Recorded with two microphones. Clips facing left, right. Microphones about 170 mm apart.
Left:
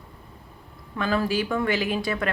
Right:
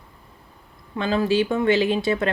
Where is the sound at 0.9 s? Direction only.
25° right (ahead or behind).